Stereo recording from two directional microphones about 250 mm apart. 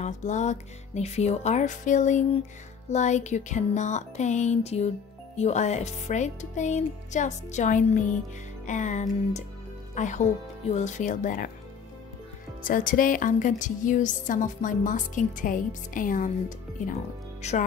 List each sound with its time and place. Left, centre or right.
0.0 s music: left
12.6 s music: left
17.4 s speech: left